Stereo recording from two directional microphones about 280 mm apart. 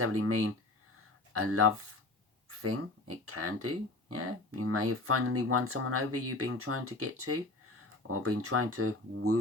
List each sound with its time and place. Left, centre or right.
0.0 s speech: right